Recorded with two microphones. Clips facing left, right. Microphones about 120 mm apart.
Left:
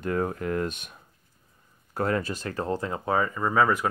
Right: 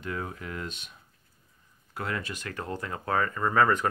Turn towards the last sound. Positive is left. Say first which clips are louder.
# left 1 dB
turn(degrees=5)  # may be behind; listen again after turning